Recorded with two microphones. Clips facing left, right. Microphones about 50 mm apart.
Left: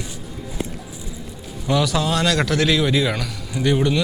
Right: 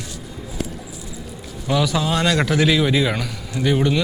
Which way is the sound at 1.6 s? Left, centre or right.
Centre.